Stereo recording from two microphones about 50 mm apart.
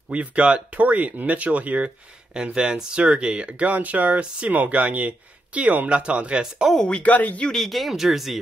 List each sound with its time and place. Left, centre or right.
0.1 s speech: right
2.3 s speech: centre
6.9 s speech: left
7.5 s speech: centre